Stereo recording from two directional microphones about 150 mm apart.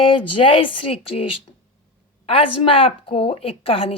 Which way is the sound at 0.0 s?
35° left (ahead or behind).